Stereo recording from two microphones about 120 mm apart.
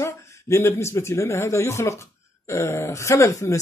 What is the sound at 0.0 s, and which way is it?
A man's voice, 25° left (ahead or behind).